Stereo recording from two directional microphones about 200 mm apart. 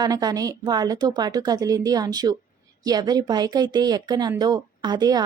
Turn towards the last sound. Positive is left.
turn(degrees=-20)  # may be behind; listen again after turning